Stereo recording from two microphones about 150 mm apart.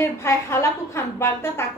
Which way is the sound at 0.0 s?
20° left (ahead or behind).